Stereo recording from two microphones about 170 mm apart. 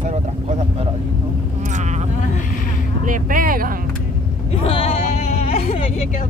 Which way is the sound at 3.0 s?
50° right (ahead or behind).